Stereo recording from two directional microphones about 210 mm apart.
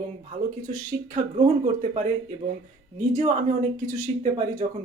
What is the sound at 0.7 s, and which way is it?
Speech, 40° right (ahead or behind).